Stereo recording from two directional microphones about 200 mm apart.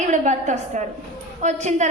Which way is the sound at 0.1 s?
35° right (ahead or behind).